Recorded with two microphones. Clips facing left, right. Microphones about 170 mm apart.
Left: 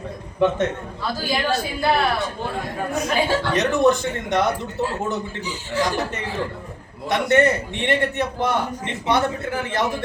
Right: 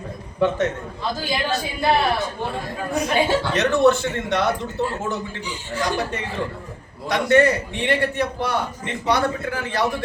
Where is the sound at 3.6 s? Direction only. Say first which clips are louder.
Right 1 dB; 15° left (ahead or behind).